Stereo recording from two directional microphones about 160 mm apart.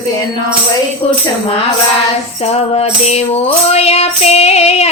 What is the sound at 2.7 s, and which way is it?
Music, 40° left (ahead or behind).